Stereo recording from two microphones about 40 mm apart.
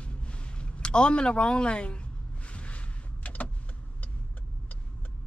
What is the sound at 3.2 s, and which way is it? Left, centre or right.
Power windows, left.